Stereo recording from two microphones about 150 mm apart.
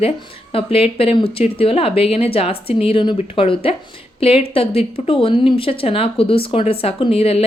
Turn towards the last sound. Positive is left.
turn(degrees=40)  # may be behind; listen again after turning